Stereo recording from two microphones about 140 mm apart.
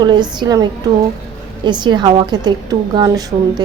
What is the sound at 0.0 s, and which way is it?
A woman's voice, 30° right (ahead or behind).